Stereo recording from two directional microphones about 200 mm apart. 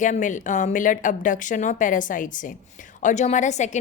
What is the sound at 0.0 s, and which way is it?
A woman's voice, 40° left (ahead or behind).